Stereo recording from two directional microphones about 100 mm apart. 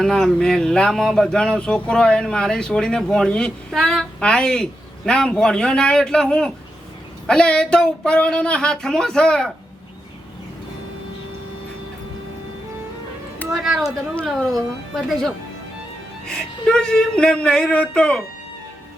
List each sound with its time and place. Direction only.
0.0 s speech: 5° left (ahead or behind)
13.5 s speech: centre (ahead or behind)
14.9 s speech: centre (ahead or behind)